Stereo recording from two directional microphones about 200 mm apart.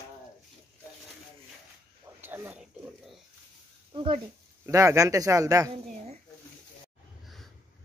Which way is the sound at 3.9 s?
25° right (ahead or behind).